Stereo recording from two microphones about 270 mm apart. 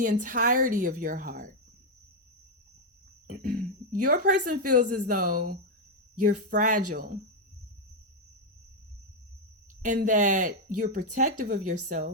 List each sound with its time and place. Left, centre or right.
0.0 s speech: right
3.2 s speech: right
9.8 s speech: right